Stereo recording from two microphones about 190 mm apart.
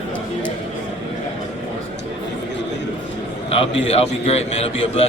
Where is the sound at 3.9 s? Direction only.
30° left (ahead or behind).